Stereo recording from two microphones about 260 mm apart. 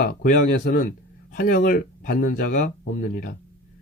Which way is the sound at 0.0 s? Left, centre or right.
Left.